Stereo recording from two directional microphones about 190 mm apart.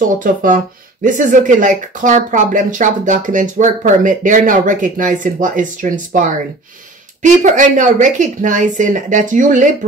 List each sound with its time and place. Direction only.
0.0 s speech: 45° right (ahead or behind)